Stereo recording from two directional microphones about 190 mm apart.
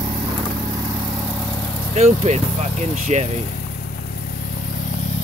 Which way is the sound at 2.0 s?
35° right (ahead or behind).